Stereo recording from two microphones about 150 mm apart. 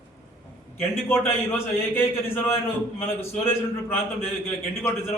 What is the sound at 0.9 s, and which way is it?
A man's voice, 15° left (ahead or behind).